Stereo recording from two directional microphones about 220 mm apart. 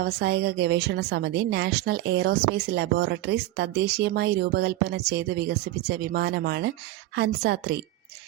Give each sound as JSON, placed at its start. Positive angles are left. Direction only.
{"t": 0.0, "sound": "a woman's voice", "side_deg": -45}